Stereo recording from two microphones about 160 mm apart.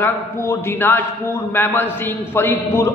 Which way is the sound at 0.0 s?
10° left (ahead or behind).